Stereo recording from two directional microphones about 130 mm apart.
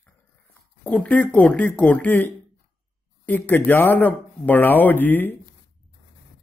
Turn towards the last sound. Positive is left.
turn(degrees=15)  # may be behind; listen again after turning